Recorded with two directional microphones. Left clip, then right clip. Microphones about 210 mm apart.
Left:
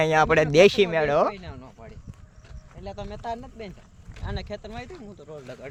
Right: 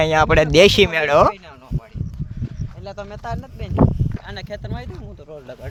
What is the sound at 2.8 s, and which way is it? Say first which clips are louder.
Speech: right 3 dB; 50° right (ahead or behind).